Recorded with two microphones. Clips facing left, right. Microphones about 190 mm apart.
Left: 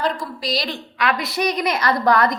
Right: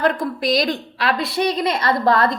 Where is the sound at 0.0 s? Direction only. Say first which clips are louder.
Right 5 dB; 55° right (ahead or behind).